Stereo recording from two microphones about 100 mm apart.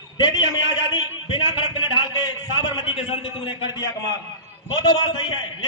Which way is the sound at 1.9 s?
50° left (ahead or behind).